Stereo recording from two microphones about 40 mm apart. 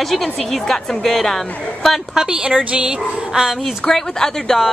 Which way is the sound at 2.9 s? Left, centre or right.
Centre.